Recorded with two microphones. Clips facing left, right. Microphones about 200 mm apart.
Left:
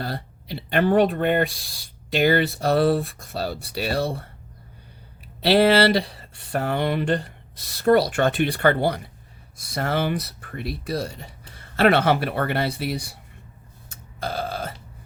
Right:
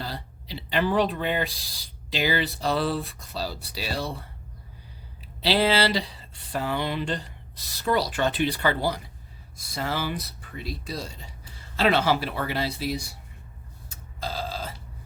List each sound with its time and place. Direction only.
0.0 s speech: 60° left (ahead or behind)
5.4 s speech: 60° left (ahead or behind)
13.9 s burping: 60° left (ahead or behind)